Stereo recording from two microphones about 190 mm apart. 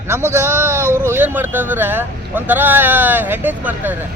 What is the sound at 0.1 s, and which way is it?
Speech, 10° right (ahead or behind).